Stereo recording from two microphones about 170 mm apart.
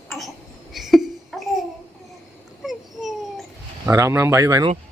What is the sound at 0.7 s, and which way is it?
Babbling, centre (ahead or behind).